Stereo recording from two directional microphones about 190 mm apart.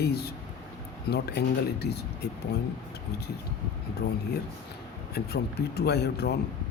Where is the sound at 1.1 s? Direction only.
60° left (ahead or behind).